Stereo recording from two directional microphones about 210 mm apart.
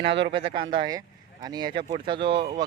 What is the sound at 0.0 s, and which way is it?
Speech, 55° right (ahead or behind).